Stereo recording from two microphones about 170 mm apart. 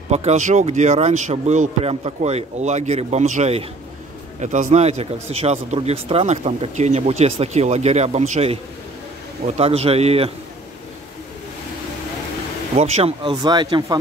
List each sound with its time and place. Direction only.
0.1 s speech: 40° right (ahead or behind)
9.6 s speech: 35° right (ahead or behind)
12.7 s speech: 40° right (ahead or behind)
13.3 s speech: 25° right (ahead or behind)